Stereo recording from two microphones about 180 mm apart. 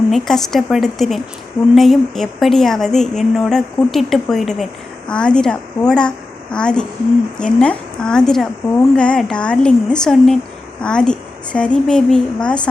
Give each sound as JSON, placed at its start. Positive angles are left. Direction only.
{"t": 0.1, "sound": "a woman's voice", "side_deg": 0}